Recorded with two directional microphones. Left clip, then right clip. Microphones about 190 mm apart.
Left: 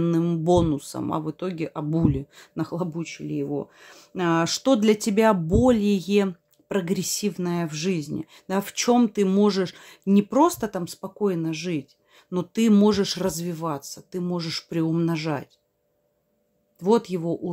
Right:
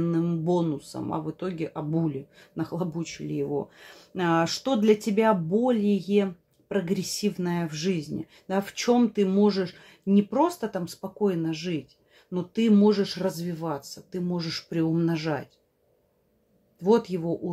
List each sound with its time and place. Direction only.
0.0 s speech: 35° left (ahead or behind)
16.8 s speech: 30° left (ahead or behind)